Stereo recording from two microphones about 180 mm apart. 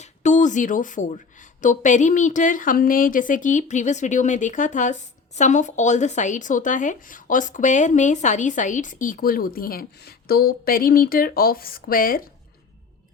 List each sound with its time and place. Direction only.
0.0 s speech: 40° left (ahead or behind)